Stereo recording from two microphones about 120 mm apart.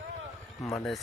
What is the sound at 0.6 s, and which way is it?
Speech, 25° left (ahead or behind).